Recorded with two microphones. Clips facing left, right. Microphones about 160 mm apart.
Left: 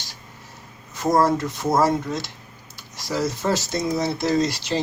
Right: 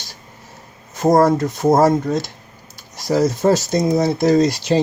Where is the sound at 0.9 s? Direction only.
50° right (ahead or behind).